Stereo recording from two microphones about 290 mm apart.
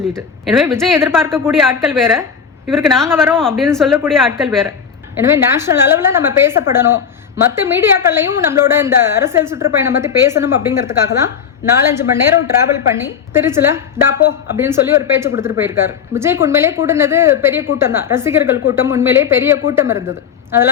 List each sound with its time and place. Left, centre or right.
0.1 s a woman's voice: centre